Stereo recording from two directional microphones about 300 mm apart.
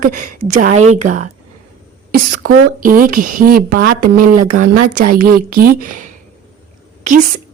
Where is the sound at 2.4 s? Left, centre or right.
Right.